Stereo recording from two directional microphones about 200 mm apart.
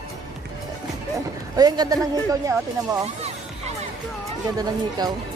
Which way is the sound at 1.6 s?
20° right (ahead or behind).